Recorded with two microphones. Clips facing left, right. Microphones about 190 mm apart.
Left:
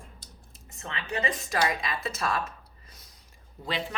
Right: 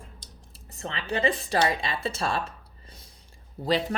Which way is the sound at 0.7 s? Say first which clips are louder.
Right 3 dB; 35° right (ahead or behind).